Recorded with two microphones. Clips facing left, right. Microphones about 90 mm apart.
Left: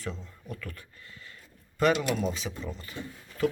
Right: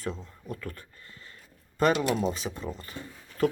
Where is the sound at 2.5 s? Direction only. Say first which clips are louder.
Right 2 dB; 20° right (ahead or behind).